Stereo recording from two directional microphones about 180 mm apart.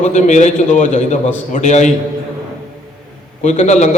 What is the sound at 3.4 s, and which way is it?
Speech, 40° left (ahead or behind).